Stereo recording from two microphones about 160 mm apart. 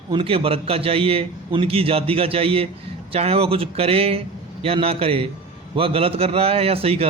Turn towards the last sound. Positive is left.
turn(degrees=-40)  # may be behind; listen again after turning